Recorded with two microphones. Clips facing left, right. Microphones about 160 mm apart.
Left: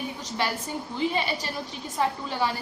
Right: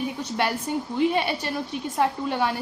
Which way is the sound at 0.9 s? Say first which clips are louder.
Right 4 dB; 60° right (ahead or behind).